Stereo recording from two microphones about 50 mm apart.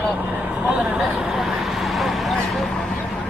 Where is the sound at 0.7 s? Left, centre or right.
Right.